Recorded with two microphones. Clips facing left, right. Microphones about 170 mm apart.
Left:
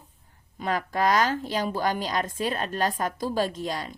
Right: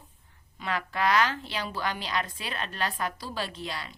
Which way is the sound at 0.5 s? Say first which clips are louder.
Left 5 dB; 40° left (ahead or behind).